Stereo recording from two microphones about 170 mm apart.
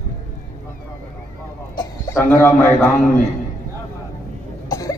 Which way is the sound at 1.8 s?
15° left (ahead or behind).